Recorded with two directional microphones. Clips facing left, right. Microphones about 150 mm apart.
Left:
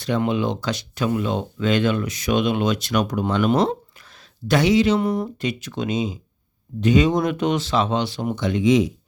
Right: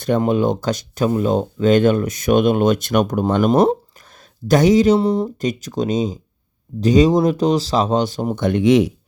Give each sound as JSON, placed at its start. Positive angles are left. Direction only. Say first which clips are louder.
{"t": 0.0, "sound": "speech", "louder": "right 5 dB", "side_deg": -45}
{"t": 5.4, "sound": "speech", "louder": "right 5 dB", "side_deg": -40}
{"t": 8.4, "sound": "speech", "louder": "right 4 dB", "side_deg": -55}